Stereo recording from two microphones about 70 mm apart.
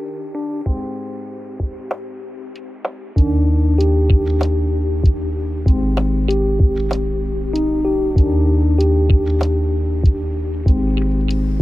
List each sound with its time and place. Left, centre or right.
2.8 s music: centre
5.6 s music: centre
10.6 s music: centre